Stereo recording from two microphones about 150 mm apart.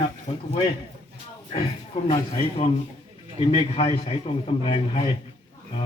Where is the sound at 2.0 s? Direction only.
45° left (ahead or behind).